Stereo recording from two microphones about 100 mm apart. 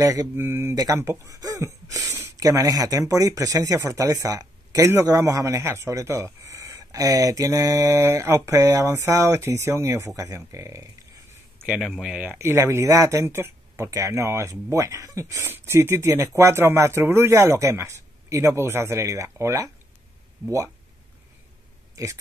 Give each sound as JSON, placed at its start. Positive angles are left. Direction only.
{"t": 0.0, "sound": "speech", "side_deg": -35}
{"t": 0.4, "sound": "speech", "side_deg": -25}
{"t": 11.8, "sound": "speech", "side_deg": -5}
{"t": 12.3, "sound": "speech", "side_deg": -25}